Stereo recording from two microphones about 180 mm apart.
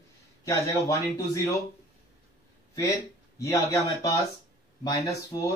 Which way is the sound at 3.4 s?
15° left (ahead or behind).